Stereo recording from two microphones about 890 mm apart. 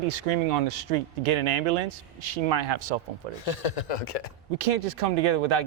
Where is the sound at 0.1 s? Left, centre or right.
Right.